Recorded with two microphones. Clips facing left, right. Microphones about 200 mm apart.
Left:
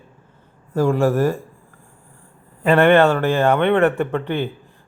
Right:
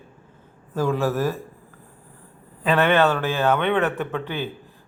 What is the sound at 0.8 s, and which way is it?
Speech, 15° left (ahead or behind).